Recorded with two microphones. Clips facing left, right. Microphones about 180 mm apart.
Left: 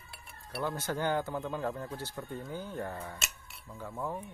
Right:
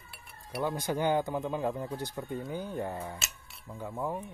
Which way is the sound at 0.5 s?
15° right (ahead or behind).